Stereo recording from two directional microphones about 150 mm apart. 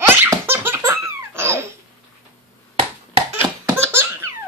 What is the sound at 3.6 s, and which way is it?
Laughter, 15° right (ahead or behind).